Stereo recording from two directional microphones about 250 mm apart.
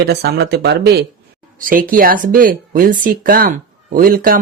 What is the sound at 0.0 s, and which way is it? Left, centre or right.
Speech, right.